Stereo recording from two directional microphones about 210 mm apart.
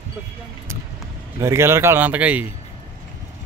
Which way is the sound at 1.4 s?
10° right (ahead or behind).